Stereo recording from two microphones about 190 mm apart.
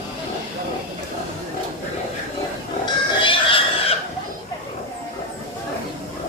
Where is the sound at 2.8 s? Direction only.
25° left (ahead or behind).